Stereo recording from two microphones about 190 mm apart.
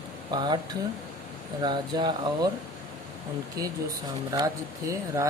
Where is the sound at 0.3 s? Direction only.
20° right (ahead or behind).